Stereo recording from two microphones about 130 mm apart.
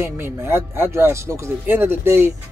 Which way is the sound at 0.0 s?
20° right (ahead or behind).